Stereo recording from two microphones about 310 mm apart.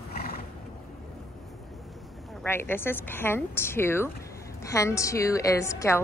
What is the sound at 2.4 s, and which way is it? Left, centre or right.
A woman's voice, centre.